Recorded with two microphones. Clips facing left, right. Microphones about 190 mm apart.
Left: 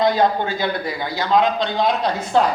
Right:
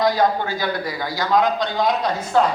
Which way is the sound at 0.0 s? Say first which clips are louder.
Left 1 dB; 20° left (ahead or behind).